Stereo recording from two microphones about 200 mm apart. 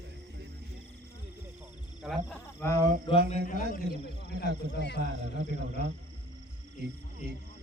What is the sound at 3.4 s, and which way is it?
Speech, 40° left (ahead or behind).